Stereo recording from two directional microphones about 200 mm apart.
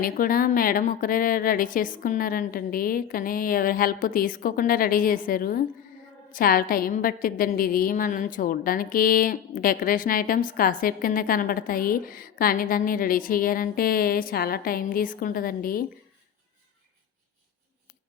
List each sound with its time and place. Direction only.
0.0 s a woman's voice: 45° left (ahead or behind)